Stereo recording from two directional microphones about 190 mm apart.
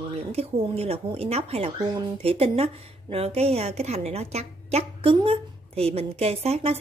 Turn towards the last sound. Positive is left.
turn(degrees=-35)  # may be behind; listen again after turning